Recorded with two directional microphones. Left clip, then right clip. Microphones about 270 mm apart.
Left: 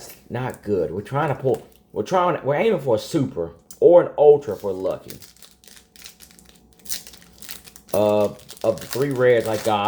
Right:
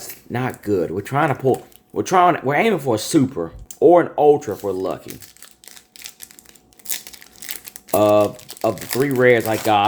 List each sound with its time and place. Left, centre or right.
0.0 s speech: right
7.9 s speech: right